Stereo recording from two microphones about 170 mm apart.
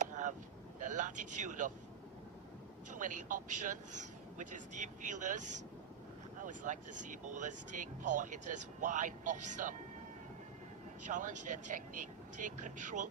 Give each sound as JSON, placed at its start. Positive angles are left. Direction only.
{"t": 0.0, "sound": "vehicle", "side_deg": -45}
{"t": 0.8, "sound": "speech", "side_deg": -45}
{"t": 2.9, "sound": "speech", "side_deg": -45}
{"t": 6.4, "sound": "speech", "side_deg": -50}
{"t": 11.1, "sound": "speech", "side_deg": -45}